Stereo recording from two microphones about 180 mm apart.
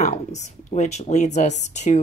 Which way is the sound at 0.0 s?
40° left (ahead or behind).